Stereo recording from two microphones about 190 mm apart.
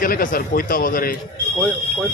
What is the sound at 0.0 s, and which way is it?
A man's voice, 45° left (ahead or behind).